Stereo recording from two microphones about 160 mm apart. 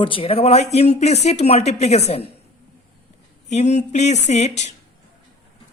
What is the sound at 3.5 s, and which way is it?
A woman's voice, 45° left (ahead or behind).